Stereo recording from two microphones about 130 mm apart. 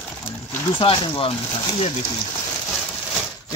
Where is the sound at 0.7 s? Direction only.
40° left (ahead or behind).